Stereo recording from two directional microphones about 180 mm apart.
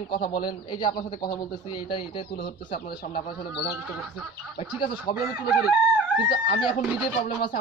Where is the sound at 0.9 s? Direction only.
55° left (ahead or behind).